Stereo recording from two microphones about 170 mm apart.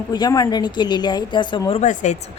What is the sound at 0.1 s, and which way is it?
A woman's voice, 20° left (ahead or behind).